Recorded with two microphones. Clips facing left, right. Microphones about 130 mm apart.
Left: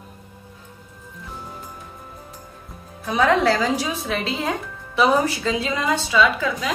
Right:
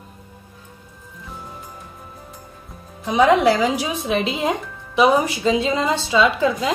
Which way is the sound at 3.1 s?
15° right (ahead or behind).